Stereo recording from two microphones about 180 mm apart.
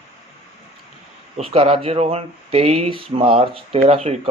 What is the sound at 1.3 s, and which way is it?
Speech, 35° right (ahead or behind).